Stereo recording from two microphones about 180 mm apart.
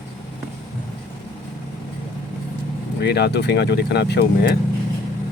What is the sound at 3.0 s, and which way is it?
Speech, 65° left (ahead or behind).